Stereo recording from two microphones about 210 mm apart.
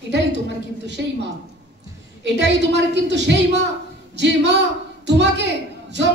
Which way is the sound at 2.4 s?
55° right (ahead or behind).